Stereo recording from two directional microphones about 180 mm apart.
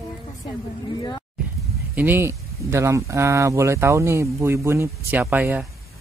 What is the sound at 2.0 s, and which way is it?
Speech, 10° right (ahead or behind).